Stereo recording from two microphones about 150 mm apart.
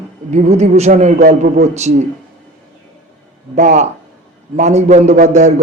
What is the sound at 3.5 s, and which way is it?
Speech, 50° right (ahead or behind).